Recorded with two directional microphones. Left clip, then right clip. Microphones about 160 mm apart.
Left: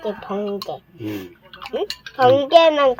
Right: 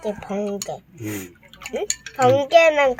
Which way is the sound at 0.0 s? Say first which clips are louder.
Left 1 dB; 5° left (ahead or behind).